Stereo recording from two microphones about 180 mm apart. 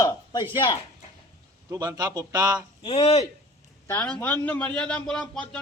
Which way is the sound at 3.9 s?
5° left (ahead or behind).